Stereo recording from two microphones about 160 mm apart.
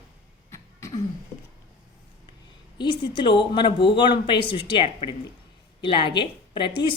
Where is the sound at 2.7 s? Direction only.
30° left (ahead or behind).